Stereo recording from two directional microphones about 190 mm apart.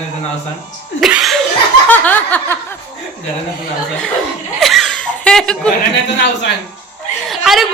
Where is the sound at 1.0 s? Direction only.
5° right (ahead or behind).